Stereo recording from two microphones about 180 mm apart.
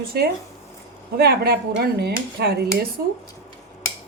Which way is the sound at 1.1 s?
60° right (ahead or behind).